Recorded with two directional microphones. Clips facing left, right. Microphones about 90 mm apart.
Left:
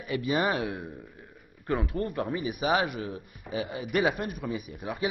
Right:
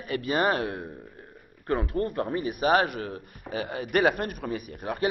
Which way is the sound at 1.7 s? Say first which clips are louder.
Right 2 dB; 35° right (ahead or behind).